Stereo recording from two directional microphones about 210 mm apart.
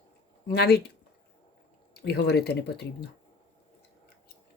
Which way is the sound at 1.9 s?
50° left (ahead or behind).